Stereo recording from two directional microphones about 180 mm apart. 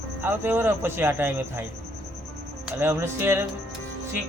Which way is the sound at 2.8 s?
15° right (ahead or behind).